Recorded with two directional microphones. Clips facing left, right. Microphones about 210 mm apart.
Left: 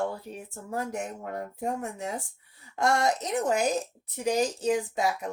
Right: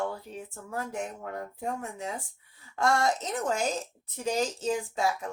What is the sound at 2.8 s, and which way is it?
Speech, 20° left (ahead or behind).